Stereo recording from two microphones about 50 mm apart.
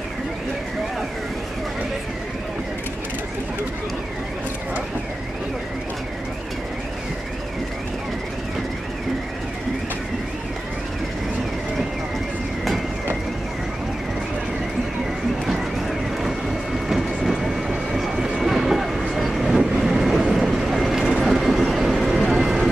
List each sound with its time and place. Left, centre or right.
15.4 s vehicle: centre
18.1 s train: centre
18.4 s vehicle: centre